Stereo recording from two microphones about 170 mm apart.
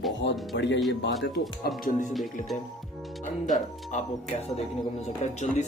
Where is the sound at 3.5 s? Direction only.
40° left (ahead or behind).